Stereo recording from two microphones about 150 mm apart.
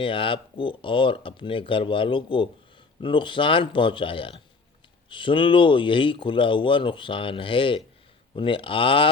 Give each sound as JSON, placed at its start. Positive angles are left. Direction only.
{"t": 0.0, "sound": "speech", "side_deg": 35}